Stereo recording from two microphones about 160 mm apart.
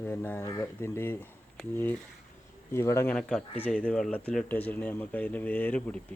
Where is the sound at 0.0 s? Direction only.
15° left (ahead or behind).